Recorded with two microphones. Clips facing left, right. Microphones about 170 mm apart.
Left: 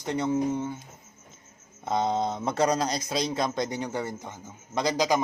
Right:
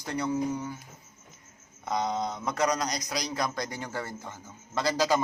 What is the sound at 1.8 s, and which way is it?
A man's voice, 25° left (ahead or behind).